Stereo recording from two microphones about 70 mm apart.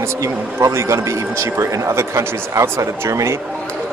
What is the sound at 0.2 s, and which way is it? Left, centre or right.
Speech, right.